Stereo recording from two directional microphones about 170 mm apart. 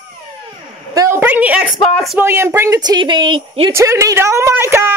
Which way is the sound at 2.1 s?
15° right (ahead or behind).